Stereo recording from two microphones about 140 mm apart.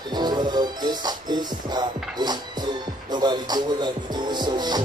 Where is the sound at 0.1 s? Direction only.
30° right (ahead or behind).